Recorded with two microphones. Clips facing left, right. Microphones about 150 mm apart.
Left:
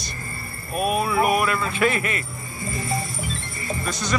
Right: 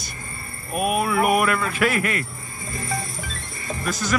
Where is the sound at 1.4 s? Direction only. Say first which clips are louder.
Right 1 dB; 30° left (ahead or behind).